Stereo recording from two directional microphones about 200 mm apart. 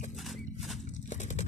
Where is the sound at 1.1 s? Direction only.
35° left (ahead or behind).